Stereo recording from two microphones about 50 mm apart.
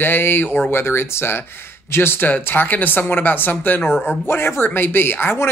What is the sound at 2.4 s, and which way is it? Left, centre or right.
Speech, left.